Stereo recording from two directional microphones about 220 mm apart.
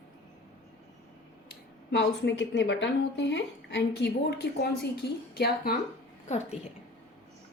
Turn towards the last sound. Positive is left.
turn(degrees=30)  # may be behind; listen again after turning